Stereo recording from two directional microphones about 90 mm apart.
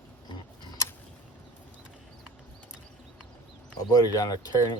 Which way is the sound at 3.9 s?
40° left (ahead or behind).